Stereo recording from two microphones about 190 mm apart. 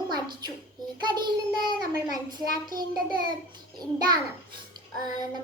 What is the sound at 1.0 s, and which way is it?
A child's voice, 25° right (ahead or behind).